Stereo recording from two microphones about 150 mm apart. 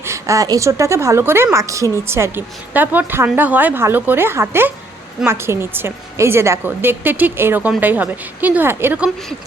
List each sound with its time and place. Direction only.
0.0 s a woman's voice: 20° right (ahead or behind)